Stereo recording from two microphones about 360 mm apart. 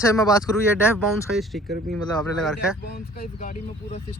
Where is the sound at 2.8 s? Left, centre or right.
Left.